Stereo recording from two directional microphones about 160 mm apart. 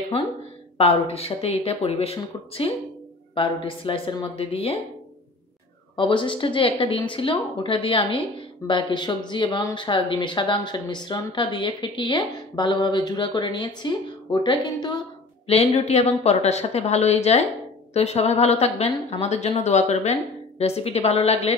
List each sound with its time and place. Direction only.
0.7 s a woman's voice: 40° left (ahead or behind)
5.9 s a woman's voice: 30° left (ahead or behind)
15.4 s a woman's voice: 40° left (ahead or behind)